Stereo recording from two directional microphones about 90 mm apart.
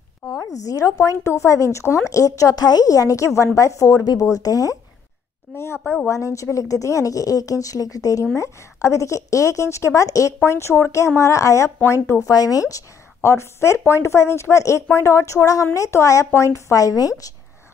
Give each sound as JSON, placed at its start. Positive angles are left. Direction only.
{"t": 0.3, "sound": "speech", "side_deg": 40}
{"t": 5.6, "sound": "speech", "side_deg": 30}
{"t": 12.2, "sound": "speech", "side_deg": 40}